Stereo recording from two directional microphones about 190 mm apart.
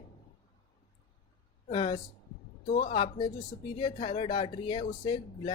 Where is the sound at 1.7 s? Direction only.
25° left (ahead or behind).